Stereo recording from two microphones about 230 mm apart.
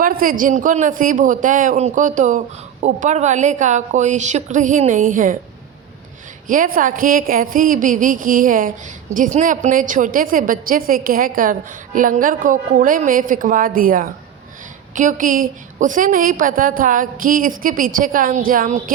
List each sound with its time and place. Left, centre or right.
0.0 s a woman's voice: right
6.5 s a woman's voice: right